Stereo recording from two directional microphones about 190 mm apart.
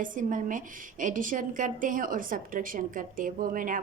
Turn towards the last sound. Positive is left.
turn(degrees=-45)  # may be behind; listen again after turning